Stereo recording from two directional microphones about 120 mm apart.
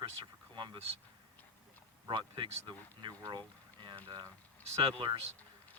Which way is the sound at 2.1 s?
40° right (ahead or behind).